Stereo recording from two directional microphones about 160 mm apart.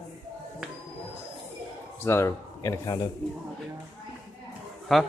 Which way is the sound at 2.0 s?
15° left (ahead or behind).